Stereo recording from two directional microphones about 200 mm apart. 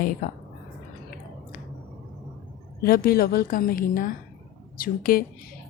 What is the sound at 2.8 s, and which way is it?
A woman's voice, 45° left (ahead or behind).